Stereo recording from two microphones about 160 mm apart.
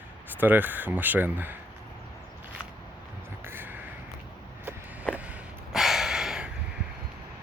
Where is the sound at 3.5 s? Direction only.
15° right (ahead or behind).